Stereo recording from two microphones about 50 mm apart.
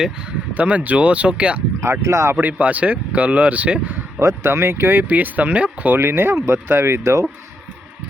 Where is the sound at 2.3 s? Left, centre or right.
Right.